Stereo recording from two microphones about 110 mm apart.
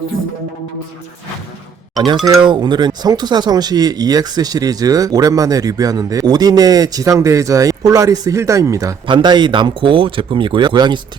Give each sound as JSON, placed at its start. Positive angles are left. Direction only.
{"t": 2.4, "sound": "speech", "side_deg": -45}
{"t": 9.0, "sound": "speech", "side_deg": -45}